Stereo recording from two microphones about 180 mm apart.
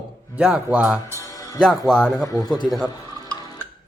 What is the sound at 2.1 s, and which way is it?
Speech, 20° left (ahead or behind).